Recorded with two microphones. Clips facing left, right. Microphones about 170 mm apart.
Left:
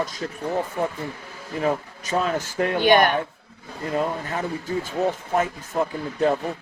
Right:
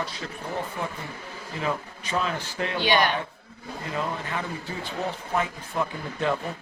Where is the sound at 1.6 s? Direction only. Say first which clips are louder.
Left 6 dB; 45° left (ahead or behind).